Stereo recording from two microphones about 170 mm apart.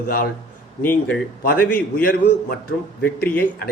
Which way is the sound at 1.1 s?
65° left (ahead or behind).